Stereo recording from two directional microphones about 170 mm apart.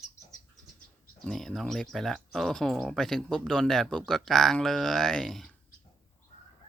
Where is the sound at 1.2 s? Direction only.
5° left (ahead or behind).